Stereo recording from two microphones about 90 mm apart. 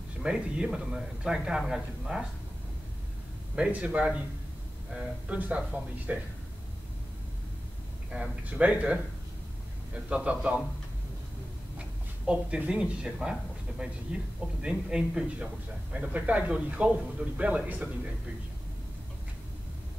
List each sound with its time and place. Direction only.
0.2 s speech: 10° right (ahead or behind)
3.5 s speech: 10° right (ahead or behind)
8.1 s speech: 15° right (ahead or behind)
10.0 s speech: 15° right (ahead or behind)
12.3 s speech: 10° right (ahead or behind)